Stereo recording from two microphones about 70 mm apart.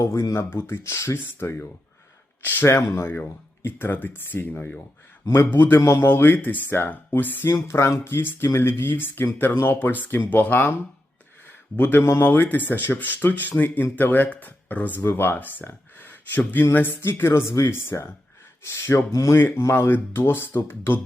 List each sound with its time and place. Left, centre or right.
0.0 s speech: left
5.2 s a man's voice: left
5.5 s speech: left
5.8 s speech: left
6.1 s speech: left
11.4 s a sound: left
12.0 s speech: left
19.4 s speech: left
19.6 s speech: left